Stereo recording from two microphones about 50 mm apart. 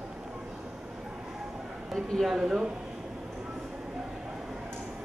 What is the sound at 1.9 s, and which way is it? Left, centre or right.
Speech, centre.